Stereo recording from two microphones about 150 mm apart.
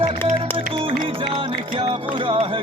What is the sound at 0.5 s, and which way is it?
Music, 35° right (ahead or behind).